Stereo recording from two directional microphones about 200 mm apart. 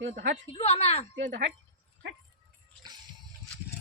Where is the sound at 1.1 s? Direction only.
65° right (ahead or behind).